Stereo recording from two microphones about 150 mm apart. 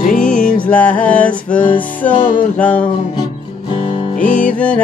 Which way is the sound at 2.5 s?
10° left (ahead or behind).